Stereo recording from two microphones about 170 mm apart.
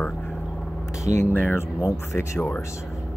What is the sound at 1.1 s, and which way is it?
Speech, 10° left (ahead or behind).